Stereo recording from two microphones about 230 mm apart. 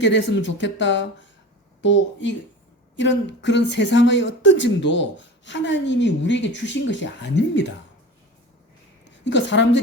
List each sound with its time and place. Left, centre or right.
0.1 s speech: left
9.2 s speech: left